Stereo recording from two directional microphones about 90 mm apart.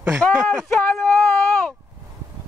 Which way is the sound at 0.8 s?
25° left (ahead or behind).